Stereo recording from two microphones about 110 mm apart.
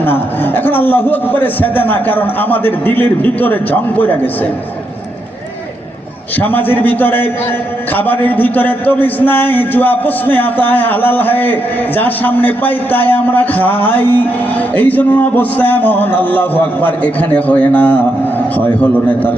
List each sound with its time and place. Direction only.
0.0 s a man's voice: 15° left (ahead or behind)
6.4 s a man's voice: 15° left (ahead or behind)